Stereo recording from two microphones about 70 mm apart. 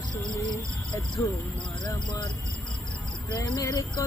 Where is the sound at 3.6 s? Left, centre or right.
Left.